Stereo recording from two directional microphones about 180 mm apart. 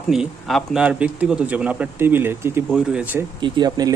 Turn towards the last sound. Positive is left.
turn(degrees=-20)  # may be behind; listen again after turning